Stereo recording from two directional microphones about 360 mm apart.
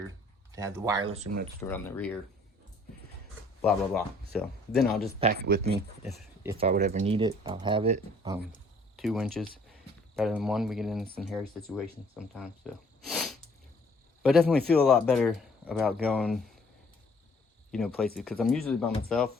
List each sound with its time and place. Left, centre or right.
0.5 s speech: centre
1.6 s speech: centre
3.6 s speech: centre
5.2 s speech: right
6.1 s speech: centre
9.0 s speech: centre
17.7 s speech: centre